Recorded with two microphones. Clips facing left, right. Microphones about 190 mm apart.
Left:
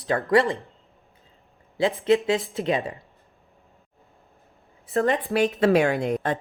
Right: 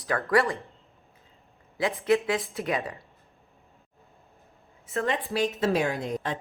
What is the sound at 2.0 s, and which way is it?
Speech, 25° left (ahead or behind).